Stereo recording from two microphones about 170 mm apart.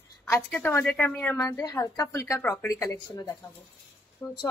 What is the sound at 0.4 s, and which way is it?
Speech, centre (ahead or behind).